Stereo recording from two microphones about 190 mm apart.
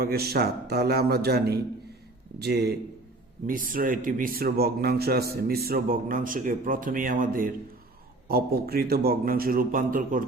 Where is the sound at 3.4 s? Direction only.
45° right (ahead or behind).